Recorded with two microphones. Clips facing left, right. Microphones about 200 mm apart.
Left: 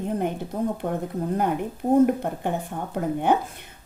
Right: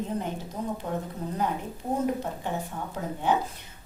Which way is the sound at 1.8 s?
45° left (ahead or behind).